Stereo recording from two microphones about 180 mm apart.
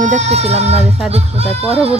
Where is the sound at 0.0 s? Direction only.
40° right (ahead or behind).